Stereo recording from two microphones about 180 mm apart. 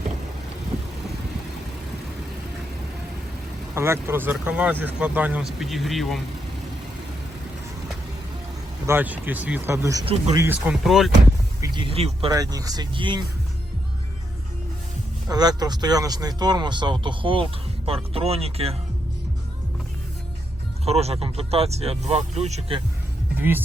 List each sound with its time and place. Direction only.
3.8 s speech: 15° right (ahead or behind)
8.9 s speech: 10° right (ahead or behind)
11.6 s speech: 25° right (ahead or behind)
12.3 s speech: 20° right (ahead or behind)
15.3 s speech: 20° right (ahead or behind)
20.8 s speech: 35° right (ahead or behind)
23.4 s speech: 10° right (ahead or behind)